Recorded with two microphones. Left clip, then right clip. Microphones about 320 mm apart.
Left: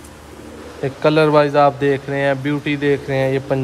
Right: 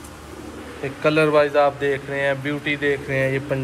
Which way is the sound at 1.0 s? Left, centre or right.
Left.